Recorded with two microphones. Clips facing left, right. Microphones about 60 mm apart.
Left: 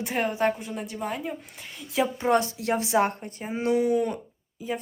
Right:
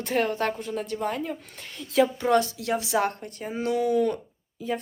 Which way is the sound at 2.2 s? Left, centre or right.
Left.